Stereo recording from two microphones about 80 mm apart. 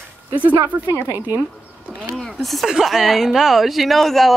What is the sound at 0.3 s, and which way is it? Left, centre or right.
Speech, right.